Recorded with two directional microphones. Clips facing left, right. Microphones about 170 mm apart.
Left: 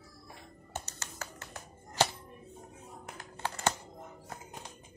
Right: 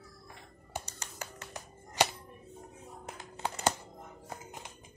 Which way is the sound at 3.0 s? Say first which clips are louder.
Right 1 dB; 20° right (ahead or behind).